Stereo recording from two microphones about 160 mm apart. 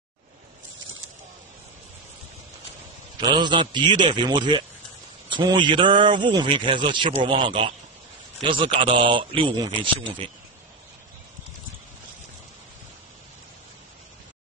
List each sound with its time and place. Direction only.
3.2 s a man's voice: 30° right (ahead or behind)